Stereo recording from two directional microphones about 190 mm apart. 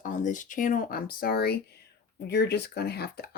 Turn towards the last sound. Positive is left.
turn(degrees=55)  # may be behind; listen again after turning